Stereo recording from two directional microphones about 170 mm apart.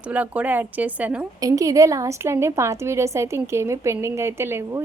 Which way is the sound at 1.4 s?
20° right (ahead or behind).